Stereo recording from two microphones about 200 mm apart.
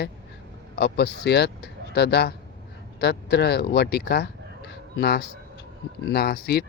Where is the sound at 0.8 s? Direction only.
55° left (ahead or behind).